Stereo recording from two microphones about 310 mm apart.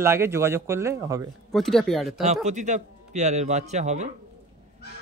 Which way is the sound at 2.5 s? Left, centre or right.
Right.